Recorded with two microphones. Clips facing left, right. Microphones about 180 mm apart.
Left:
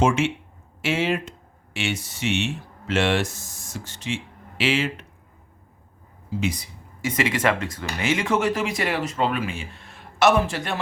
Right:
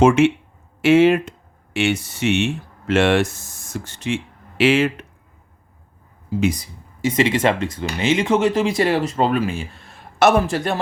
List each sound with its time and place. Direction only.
0.0 s speech: 60° right (ahead or behind)
6.4 s speech: 45° right (ahead or behind)
7.0 s speech: 25° right (ahead or behind)